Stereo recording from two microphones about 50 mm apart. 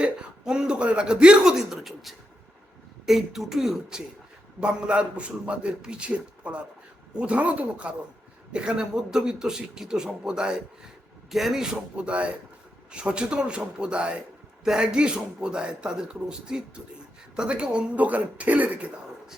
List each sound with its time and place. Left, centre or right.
0.0 s speech: centre
11.3 s a man's voice: centre
11.6 s speech: centre
17.9 s speech: right